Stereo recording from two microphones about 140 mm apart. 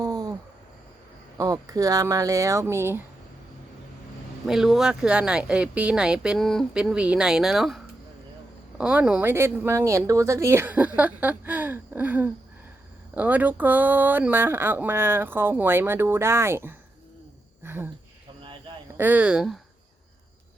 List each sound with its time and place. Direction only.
0.0 s a sound: 25° right (ahead or behind)
1.4 s speech: 25° right (ahead or behind)
4.4 s speech: 5° right (ahead or behind)
8.8 s speech: 10° right (ahead or behind)
17.6 s a sound: 15° right (ahead or behind)
18.9 s speech: 10° right (ahead or behind)